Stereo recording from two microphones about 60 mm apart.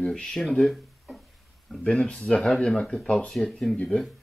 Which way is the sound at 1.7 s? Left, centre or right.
Centre.